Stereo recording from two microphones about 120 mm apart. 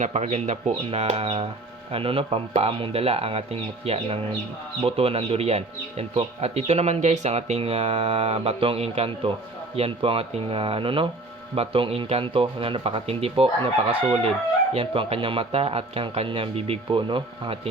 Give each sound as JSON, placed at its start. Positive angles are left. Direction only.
{"t": 0.0, "sound": "speech", "side_deg": -70}
{"t": 14.7, "sound": "speech", "side_deg": -50}